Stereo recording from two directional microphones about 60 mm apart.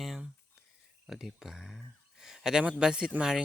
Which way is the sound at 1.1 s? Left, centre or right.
Centre.